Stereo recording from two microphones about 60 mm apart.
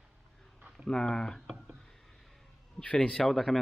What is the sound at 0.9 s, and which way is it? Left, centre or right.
Speech, centre.